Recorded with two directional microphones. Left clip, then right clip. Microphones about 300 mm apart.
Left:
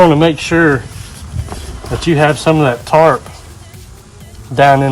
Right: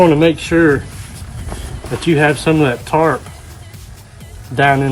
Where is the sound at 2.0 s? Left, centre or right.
Centre.